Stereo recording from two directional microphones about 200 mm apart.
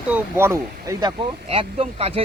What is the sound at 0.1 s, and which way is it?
Speech, 10° right (ahead or behind).